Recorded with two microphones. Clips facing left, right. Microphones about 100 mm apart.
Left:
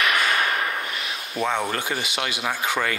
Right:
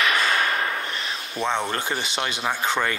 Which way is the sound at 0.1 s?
30° right (ahead or behind).